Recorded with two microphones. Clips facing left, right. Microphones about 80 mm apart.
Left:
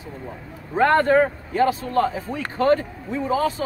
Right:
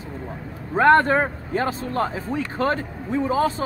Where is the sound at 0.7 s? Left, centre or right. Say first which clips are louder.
Even; right.